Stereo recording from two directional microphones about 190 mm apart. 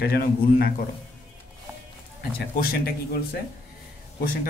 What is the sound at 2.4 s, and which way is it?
Speech, 55° left (ahead or behind).